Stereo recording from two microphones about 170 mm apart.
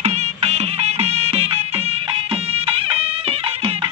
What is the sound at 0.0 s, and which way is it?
Music, 40° right (ahead or behind).